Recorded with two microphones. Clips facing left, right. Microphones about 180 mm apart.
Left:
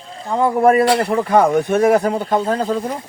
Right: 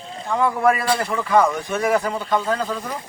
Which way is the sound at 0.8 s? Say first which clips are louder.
Left 7 dB; 65° left (ahead or behind).